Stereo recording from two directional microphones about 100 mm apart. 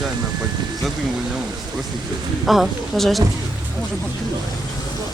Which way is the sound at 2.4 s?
Centre (ahead or behind).